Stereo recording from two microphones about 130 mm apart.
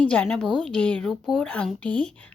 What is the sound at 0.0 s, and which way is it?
Speech, 10° left (ahead or behind).